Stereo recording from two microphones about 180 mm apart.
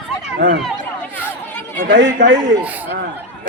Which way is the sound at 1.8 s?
80° right.